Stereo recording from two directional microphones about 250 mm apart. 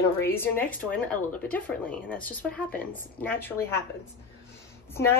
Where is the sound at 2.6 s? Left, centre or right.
Left.